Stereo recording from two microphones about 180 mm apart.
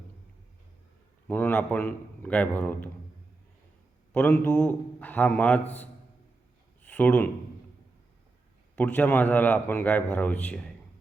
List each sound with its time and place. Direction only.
1.3 s a man's voice: 10° left (ahead or behind)
4.1 s a man's voice: 10° left (ahead or behind)
6.8 s speech: 10° left (ahead or behind)
8.7 s a man's voice: 10° left (ahead or behind)